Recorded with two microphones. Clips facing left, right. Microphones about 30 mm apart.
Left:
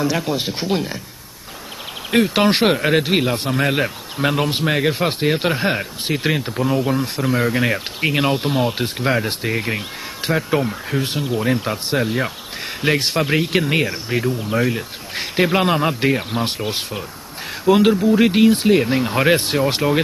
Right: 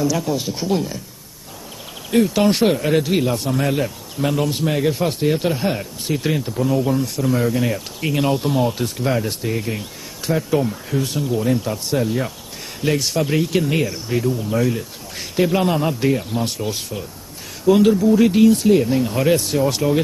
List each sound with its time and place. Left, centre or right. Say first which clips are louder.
0.0 s speech: even; left
2.1 s speech: even; left